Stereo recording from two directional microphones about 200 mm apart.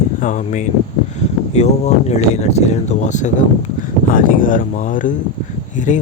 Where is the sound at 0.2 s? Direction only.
40° left (ahead or behind).